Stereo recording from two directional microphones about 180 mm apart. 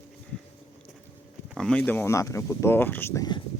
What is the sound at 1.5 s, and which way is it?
Speech, 5° left (ahead or behind).